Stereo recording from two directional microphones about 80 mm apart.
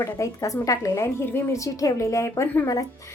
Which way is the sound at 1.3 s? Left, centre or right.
Left.